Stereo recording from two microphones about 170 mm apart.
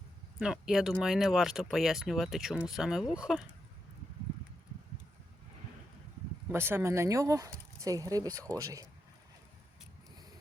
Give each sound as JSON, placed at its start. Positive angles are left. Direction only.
{"t": 0.3, "sound": "speech", "side_deg": -5}
{"t": 6.5, "sound": "speech", "side_deg": -15}